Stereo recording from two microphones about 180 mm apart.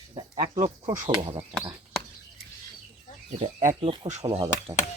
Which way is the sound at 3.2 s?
40° right (ahead or behind).